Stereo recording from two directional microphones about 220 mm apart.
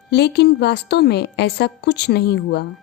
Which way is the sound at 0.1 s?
50° left (ahead or behind).